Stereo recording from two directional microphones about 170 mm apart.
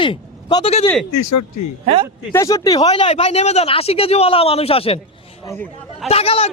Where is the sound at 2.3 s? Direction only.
20° left (ahead or behind).